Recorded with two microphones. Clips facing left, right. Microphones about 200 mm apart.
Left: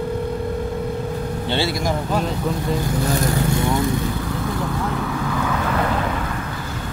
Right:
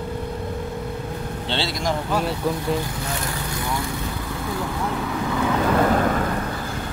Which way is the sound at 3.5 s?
25° left (ahead or behind).